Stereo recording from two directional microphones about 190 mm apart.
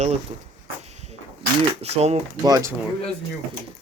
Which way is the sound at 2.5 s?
20° right (ahead or behind).